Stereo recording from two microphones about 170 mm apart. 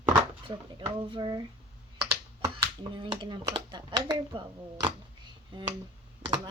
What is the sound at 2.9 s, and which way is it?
Speech, 30° right (ahead or behind).